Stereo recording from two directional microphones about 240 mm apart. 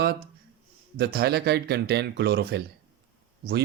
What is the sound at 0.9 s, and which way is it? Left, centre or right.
Speech, right.